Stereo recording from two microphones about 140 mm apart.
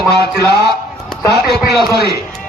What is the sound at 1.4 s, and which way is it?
Speech, 30° right (ahead or behind).